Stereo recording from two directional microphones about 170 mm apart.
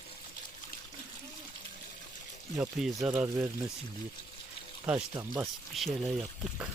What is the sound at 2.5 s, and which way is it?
Speech, 5° right (ahead or behind).